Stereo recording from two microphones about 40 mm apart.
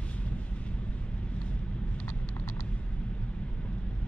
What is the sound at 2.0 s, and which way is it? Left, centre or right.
Vehicle, left.